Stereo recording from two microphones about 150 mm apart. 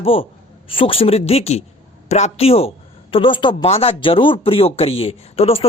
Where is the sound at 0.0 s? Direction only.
40° left (ahead or behind).